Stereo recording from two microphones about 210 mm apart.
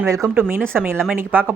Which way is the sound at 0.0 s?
10° right (ahead or behind).